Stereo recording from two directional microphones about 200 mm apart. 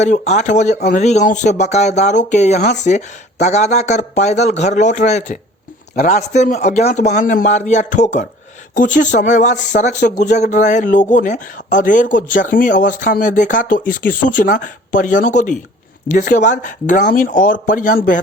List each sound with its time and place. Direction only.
0.0 s speech: 35° left (ahead or behind)